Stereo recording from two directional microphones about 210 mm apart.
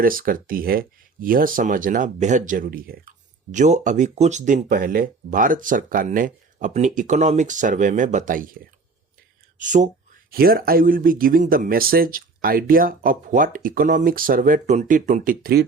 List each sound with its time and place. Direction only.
0.0 s speech: 40° right (ahead or behind)